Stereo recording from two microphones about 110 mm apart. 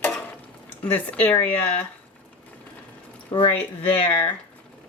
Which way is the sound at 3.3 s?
40° left (ahead or behind).